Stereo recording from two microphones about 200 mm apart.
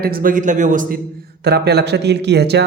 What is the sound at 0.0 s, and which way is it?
Speech, 45° right (ahead or behind).